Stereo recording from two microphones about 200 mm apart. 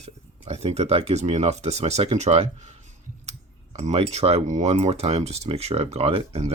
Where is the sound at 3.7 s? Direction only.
35° right (ahead or behind).